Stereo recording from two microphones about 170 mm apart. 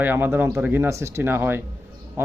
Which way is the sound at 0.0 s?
10° right (ahead or behind).